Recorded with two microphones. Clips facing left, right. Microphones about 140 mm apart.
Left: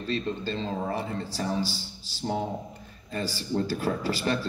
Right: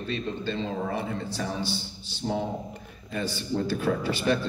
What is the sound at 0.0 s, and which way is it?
Speech, 35° left (ahead or behind).